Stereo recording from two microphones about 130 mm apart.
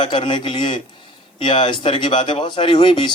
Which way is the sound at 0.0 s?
40° left (ahead or behind).